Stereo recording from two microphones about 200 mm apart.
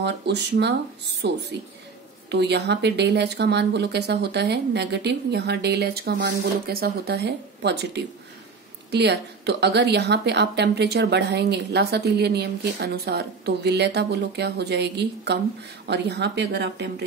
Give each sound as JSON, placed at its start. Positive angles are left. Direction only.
{"t": 0.0, "sound": "speech", "side_deg": -55}